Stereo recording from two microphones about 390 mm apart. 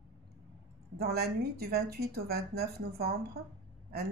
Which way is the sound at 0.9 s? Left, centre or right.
Right.